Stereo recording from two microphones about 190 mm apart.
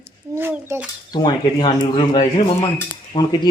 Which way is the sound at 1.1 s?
25° left (ahead or behind).